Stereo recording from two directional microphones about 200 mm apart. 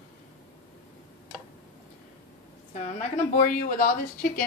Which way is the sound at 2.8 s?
40° left (ahead or behind).